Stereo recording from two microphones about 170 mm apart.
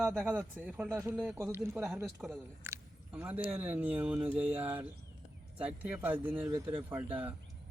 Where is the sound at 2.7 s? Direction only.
10° right (ahead or behind).